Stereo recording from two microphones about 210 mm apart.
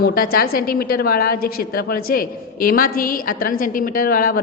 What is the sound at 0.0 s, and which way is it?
A woman's voice, 45° left (ahead or behind).